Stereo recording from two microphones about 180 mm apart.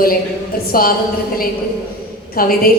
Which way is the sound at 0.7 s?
55° left (ahead or behind).